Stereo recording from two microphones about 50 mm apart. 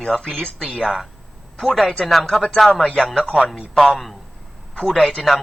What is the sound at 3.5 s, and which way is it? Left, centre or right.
Speech, centre.